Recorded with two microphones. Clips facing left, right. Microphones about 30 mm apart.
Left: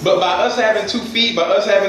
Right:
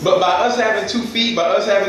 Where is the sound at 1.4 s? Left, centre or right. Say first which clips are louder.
Left 1 dB; centre.